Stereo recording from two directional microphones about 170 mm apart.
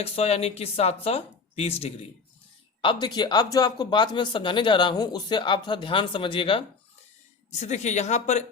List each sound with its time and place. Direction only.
0.0 s speech: 35° left (ahead or behind)
7.6 s speech: 45° left (ahead or behind)